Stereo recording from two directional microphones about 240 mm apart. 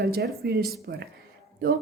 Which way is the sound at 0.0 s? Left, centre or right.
Right.